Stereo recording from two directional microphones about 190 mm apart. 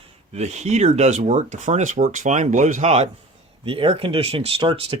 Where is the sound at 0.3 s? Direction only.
35° right (ahead or behind).